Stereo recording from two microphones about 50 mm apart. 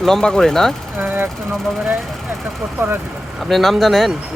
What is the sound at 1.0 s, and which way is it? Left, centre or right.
Speech, right.